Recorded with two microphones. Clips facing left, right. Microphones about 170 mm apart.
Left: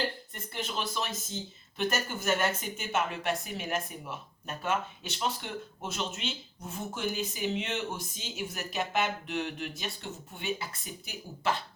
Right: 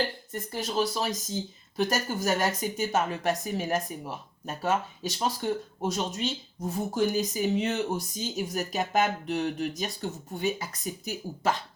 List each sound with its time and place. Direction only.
0.3 s a woman's voice: 35° right (ahead or behind)